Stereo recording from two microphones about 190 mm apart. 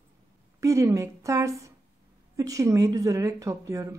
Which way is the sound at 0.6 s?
15° right (ahead or behind).